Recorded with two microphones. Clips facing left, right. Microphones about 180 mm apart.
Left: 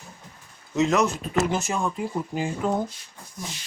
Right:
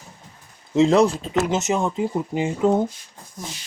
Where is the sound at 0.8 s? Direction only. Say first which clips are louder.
Right 6 dB; 30° right (ahead or behind).